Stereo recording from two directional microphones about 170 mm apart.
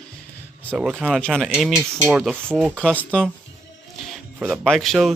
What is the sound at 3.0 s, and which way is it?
Speech, 5° left (ahead or behind).